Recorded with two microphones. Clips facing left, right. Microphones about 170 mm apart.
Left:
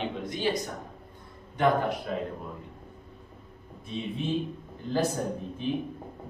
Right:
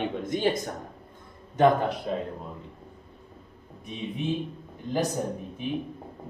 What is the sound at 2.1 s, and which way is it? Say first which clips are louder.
Speech: right 2 dB; 25° right (ahead or behind).